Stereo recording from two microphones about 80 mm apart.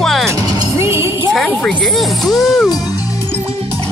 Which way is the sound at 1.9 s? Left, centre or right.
Centre.